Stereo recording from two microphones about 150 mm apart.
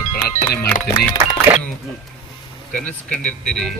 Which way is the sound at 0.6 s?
20° left (ahead or behind).